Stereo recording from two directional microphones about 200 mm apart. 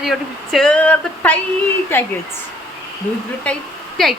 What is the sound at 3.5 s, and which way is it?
Speech, 5° left (ahead or behind).